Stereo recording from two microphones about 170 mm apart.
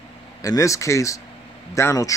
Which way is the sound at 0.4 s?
20° left (ahead or behind).